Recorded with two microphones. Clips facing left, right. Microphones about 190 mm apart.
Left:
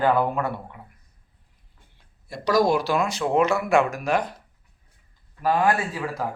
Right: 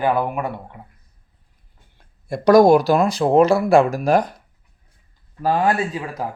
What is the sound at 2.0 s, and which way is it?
Speech, 50° right (ahead or behind).